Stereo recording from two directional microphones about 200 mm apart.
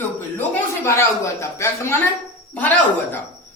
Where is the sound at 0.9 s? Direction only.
15° left (ahead or behind).